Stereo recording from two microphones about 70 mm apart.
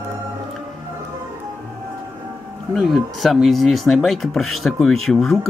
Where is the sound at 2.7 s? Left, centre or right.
Centre.